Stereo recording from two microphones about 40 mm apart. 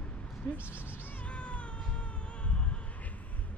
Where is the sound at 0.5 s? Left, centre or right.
Right.